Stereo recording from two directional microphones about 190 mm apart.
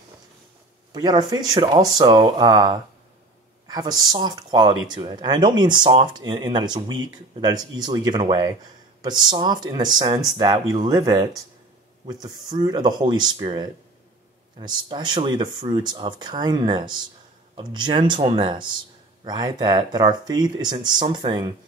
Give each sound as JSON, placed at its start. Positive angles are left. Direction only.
{"t": 0.9, "sound": "speech", "side_deg": -20}